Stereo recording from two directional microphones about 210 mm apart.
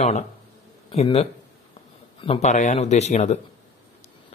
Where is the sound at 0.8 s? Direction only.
30° left (ahead or behind).